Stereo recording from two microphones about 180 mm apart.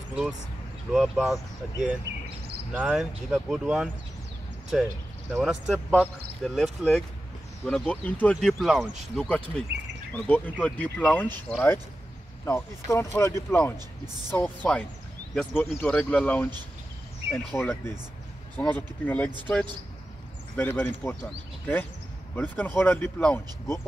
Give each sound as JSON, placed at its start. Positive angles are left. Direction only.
{"t": 0.9, "sound": "speech", "side_deg": 0}
{"t": 2.1, "sound": "a sound", "side_deg": -80}
{"t": 2.7, "sound": "speech", "side_deg": -5}
{"t": 5.3, "sound": "speech", "side_deg": -5}
{"t": 20.5, "sound": "speech", "side_deg": 10}